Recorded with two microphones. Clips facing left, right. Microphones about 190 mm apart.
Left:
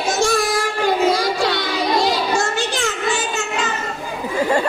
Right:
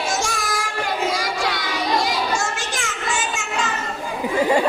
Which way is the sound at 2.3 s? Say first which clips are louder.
Left 5 dB; 60° left (ahead or behind).